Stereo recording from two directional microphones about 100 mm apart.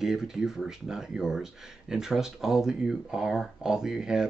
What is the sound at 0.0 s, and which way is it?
Speech, 5° right (ahead or behind).